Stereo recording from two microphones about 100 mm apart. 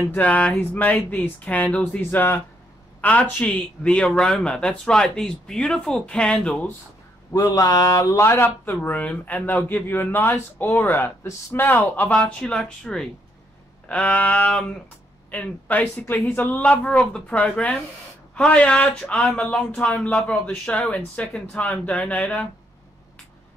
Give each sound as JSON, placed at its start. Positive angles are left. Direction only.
{"t": 0.1, "sound": "speech", "side_deg": 15}
{"t": 7.3, "sound": "speech", "side_deg": 35}